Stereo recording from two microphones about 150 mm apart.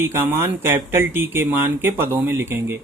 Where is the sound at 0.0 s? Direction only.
15° right (ahead or behind).